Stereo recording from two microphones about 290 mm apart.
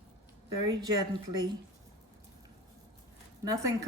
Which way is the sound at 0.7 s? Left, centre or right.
Centre.